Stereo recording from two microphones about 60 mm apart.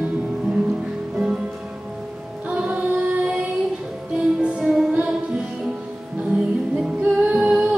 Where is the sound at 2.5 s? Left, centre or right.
Centre.